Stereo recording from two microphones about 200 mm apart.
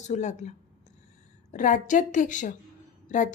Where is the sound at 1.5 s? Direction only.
40° left (ahead or behind).